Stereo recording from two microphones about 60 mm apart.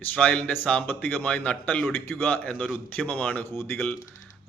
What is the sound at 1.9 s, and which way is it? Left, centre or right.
A man's voice, left.